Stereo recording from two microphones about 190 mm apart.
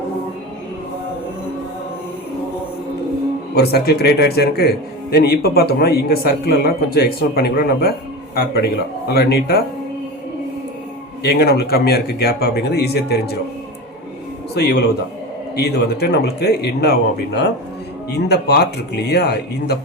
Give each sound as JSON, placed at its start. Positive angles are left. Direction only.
{"t": 3.5, "sound": "speech", "side_deg": 55}
{"t": 11.2, "sound": "speech", "side_deg": 55}
{"t": 14.5, "sound": "speech", "side_deg": 60}